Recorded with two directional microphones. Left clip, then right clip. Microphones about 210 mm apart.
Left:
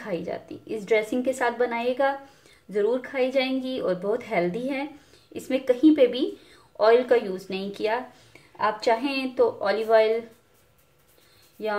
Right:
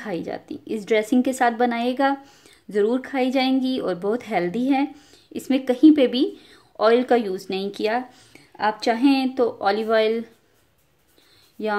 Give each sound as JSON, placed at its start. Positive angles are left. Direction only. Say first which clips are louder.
{"t": 0.0, "sound": "speech", "louder": "right 1 dB", "side_deg": -45}
{"t": 11.6, "sound": "speech", "louder": "right 3 dB", "side_deg": -50}